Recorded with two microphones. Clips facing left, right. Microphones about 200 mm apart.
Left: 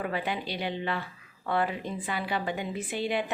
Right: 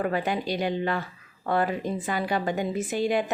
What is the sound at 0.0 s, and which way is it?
Speech, 45° right (ahead or behind).